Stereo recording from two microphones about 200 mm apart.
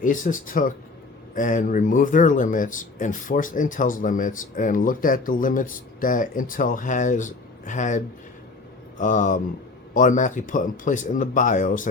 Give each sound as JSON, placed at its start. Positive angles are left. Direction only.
{"t": 0.0, "sound": "speech", "side_deg": 40}